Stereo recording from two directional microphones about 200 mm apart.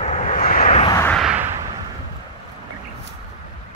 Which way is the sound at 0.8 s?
20° left (ahead or behind).